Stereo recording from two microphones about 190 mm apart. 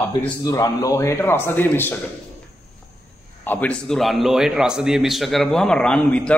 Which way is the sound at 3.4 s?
5° left (ahead or behind).